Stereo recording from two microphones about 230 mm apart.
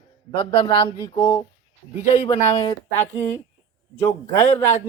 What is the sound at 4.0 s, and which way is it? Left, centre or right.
Speech, centre.